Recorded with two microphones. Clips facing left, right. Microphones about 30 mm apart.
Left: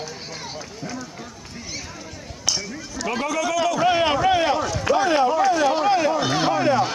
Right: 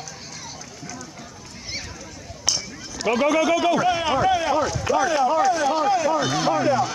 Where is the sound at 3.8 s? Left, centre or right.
Left.